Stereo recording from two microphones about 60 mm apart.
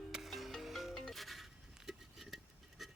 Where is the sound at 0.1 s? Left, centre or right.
Centre.